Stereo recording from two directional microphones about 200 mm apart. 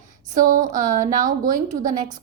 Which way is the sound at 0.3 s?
40° right (ahead or behind).